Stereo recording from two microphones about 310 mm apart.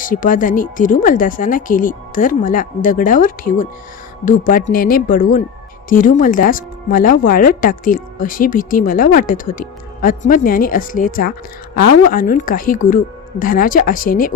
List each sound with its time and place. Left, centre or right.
0.0 s speech: left